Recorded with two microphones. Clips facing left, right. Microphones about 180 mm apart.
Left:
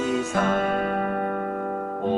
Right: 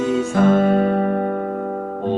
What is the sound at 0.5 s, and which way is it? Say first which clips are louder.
Music: right 8 dB; 30° right (ahead or behind).